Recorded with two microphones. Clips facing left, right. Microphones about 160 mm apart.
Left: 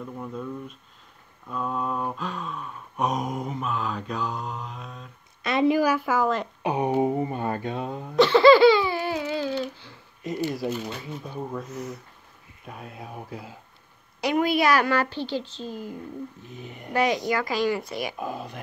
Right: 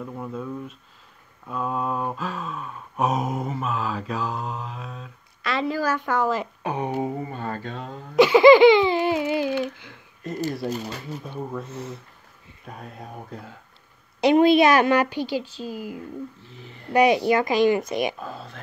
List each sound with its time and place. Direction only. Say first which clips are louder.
0.2 s a sound: right 2 dB; 5° right (ahead or behind)
5.4 s speech: left 4 dB; 20° left (ahead or behind); by 6.5 s 5° right (ahead or behind)
6.6 s speech: left 3 dB; 15° left (ahead or behind)
8.2 s speech: right 3 dB; 15° right (ahead or behind)
11.2 s a sound: even; centre (ahead or behind)
11.6 s speech: even; 30° right (ahead or behind)
12.6 s a sound: right 1 dB; 5° left (ahead or behind)
14.2 s speech: right 7 dB; 25° right (ahead or behind); by 16.0 s 10° right (ahead or behind)
16.4 s speech: left 3 dB; 15° left (ahead or behind)
16.9 s speech: right 6 dB; 15° right (ahead or behind)
18.2 s speech: left 4 dB; 15° left (ahead or behind)